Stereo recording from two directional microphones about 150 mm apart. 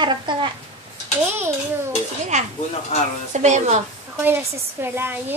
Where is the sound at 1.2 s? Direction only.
15° right (ahead or behind).